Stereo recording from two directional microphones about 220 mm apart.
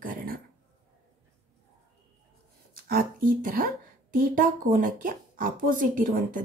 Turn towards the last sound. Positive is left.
turn(degrees=-40)  # may be behind; listen again after turning